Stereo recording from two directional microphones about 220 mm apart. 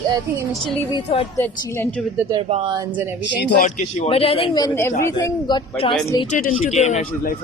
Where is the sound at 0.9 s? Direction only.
25° left (ahead or behind).